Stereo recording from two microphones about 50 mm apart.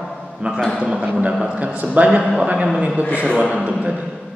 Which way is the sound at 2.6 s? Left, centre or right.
Centre.